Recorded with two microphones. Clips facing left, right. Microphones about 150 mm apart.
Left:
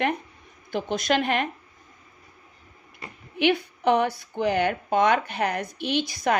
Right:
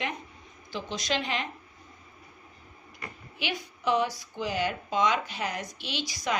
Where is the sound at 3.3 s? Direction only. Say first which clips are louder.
Left 13 dB; 60° left (ahead or behind).